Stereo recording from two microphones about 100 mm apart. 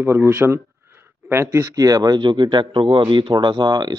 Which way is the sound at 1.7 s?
40° right (ahead or behind).